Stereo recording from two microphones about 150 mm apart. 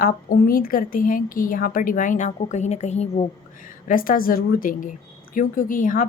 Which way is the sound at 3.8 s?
65° left (ahead or behind).